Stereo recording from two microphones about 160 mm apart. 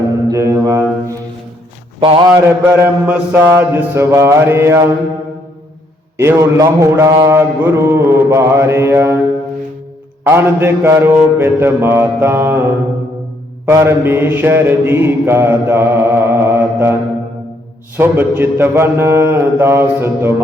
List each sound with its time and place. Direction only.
0.3 s a sound: 20° right (ahead or behind)
2.0 s a man's voice: 30° right (ahead or behind)
2.3 s mantra: 15° right (ahead or behind)
6.1 s a man's voice: 20° right (ahead or behind)
6.9 s mantra: 20° right (ahead or behind)
10.2 s mantra: 15° right (ahead or behind)
13.7 s mantra: 15° right (ahead or behind)